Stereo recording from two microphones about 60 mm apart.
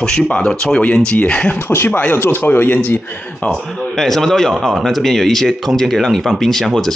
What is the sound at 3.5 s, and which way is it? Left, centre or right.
Speech, centre.